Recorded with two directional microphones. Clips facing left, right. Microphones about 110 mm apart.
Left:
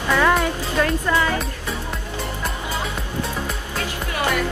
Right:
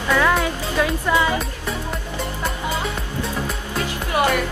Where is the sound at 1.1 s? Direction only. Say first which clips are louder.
Right 4 dB; 15° right (ahead or behind).